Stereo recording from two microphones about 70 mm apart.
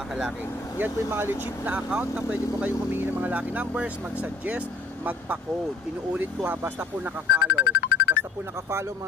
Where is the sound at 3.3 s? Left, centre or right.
Right.